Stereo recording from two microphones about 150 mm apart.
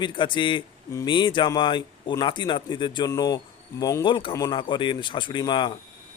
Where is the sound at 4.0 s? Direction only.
30° left (ahead or behind).